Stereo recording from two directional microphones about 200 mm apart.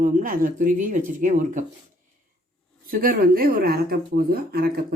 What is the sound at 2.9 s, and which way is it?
Speech, 45° right (ahead or behind).